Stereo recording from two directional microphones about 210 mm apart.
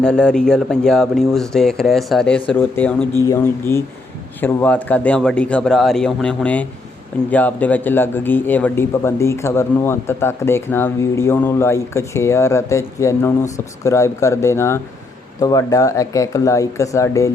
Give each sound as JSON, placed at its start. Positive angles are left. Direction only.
{"t": 0.0, "sound": "speech", "side_deg": 5}